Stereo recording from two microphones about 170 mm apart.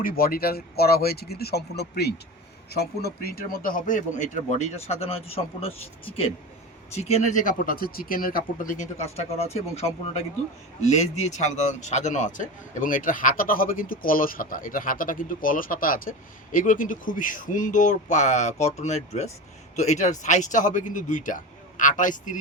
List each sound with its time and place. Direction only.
0.0 s speech: 60° left (ahead or behind)